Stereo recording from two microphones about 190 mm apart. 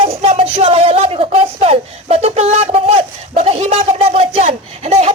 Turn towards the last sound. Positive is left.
turn(degrees=-35)  # may be behind; listen again after turning